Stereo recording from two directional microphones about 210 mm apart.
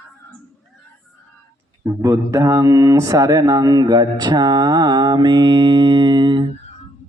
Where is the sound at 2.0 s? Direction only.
15° right (ahead or behind).